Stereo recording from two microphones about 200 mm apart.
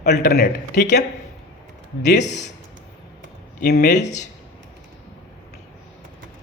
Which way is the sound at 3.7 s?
55° left (ahead or behind).